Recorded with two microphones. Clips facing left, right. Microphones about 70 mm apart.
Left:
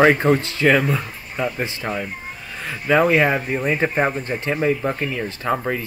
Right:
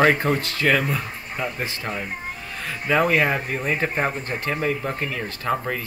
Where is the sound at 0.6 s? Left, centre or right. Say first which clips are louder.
Left 4 dB; centre.